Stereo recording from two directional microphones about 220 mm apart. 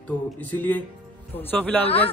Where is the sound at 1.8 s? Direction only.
25° left (ahead or behind).